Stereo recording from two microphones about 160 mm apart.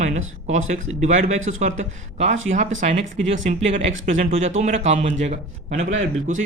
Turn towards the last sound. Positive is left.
turn(degrees=-50)  # may be behind; listen again after turning